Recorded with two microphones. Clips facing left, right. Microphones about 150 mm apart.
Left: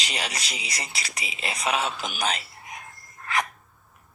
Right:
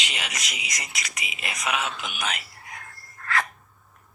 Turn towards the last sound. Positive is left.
turn(degrees=20)  # may be behind; listen again after turning